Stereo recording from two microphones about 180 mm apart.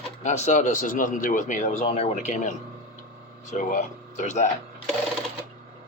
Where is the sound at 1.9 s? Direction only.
35° left (ahead or behind).